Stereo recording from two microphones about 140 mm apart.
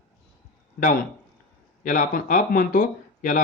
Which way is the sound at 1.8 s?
70° left (ahead or behind).